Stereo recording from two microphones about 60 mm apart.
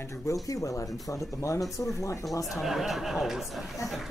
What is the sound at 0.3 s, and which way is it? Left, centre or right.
Speech, left.